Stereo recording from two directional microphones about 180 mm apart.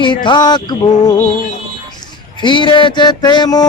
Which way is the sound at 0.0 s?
25° left (ahead or behind).